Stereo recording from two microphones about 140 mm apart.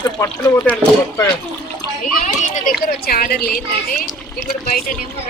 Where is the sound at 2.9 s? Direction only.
90° left.